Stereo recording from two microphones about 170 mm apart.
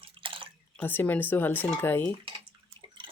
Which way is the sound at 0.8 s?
10° left (ahead or behind).